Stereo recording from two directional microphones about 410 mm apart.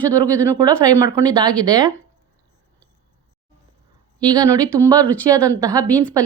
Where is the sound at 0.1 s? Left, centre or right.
Centre.